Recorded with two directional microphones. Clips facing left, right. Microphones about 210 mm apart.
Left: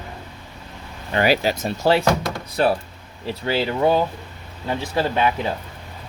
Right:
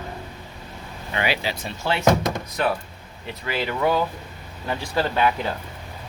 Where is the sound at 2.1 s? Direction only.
20° right (ahead or behind).